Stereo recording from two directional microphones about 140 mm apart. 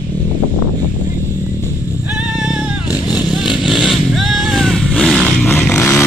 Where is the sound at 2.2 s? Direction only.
10° right (ahead or behind).